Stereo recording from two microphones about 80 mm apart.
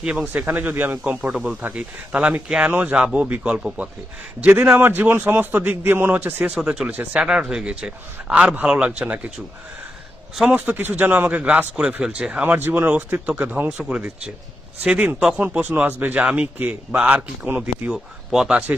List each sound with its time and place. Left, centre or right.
0.0 s a man's voice: centre
4.4 s a man's voice: right
7.2 s speech: centre
10.5 s a man's voice: right
12.5 s a man's voice: right; by 18.5 s centre